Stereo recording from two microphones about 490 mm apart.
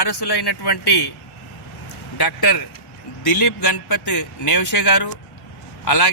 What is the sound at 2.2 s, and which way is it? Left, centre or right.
Speech, left.